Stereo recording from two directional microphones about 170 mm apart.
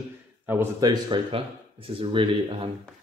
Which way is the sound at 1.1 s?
35° right (ahead or behind).